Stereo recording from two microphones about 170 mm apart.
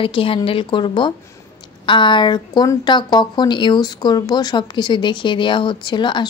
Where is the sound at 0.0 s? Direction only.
30° left (ahead or behind).